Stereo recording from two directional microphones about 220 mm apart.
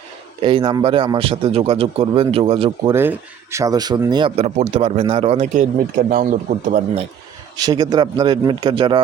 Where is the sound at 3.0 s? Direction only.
10° right (ahead or behind); by 7.0 s 35° right (ahead or behind).